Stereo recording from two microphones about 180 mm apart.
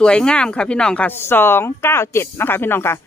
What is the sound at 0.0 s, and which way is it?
Speech, 5° left (ahead or behind).